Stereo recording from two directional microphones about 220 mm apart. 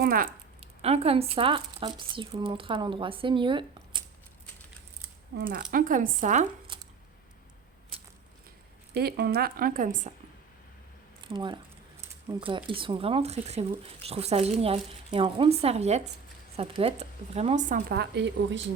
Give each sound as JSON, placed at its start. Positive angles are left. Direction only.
{"t": 0.0, "sound": "speech", "side_deg": -40}
{"t": 0.8, "sound": "speech", "side_deg": -30}
{"t": 5.4, "sound": "speech", "side_deg": -40}
{"t": 8.9, "sound": "speech", "side_deg": -45}
{"t": 11.3, "sound": "speech", "side_deg": -20}